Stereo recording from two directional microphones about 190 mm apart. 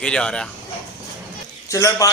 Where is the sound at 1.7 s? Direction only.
15° left (ahead or behind).